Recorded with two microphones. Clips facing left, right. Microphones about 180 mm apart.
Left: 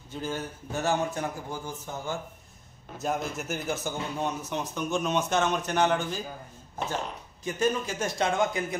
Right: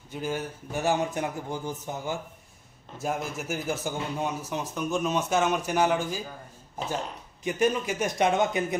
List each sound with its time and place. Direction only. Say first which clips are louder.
0.1 s a man's voice: right 2 dB; 15° right (ahead or behind)
7.4 s a man's voice: right 2 dB; 15° right (ahead or behind)